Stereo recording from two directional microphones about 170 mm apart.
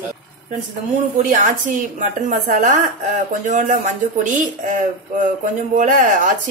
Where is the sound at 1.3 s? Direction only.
50° right (ahead or behind).